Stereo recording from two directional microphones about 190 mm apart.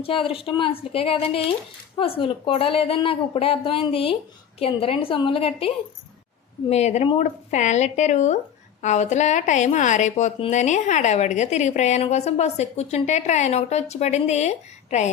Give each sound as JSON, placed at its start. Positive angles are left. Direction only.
{"t": 0.0, "sound": "a woman's voice", "side_deg": 30}